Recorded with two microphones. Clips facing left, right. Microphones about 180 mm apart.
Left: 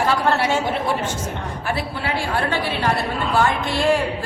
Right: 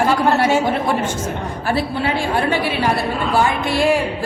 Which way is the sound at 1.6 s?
30° right (ahead or behind).